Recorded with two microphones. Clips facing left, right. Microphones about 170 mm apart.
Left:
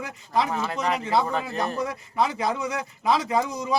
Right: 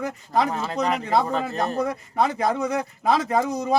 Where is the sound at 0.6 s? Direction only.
35° right (ahead or behind).